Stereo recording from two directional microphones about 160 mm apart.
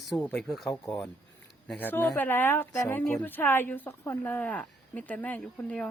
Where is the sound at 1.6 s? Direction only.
10° left (ahead or behind).